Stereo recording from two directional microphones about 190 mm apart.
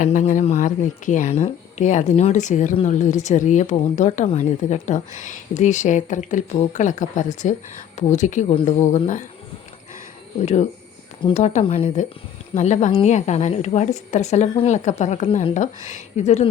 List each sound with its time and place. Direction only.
0.0 s speech: 40° left (ahead or behind)
10.4 s speech: 35° left (ahead or behind)